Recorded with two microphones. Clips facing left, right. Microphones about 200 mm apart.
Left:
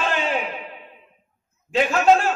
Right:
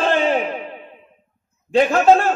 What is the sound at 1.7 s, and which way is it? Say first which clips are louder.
Speech: right 4 dB; 40° right (ahead or behind).